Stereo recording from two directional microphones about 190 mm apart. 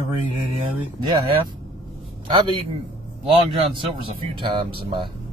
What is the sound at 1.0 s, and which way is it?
Speech, 25° right (ahead or behind).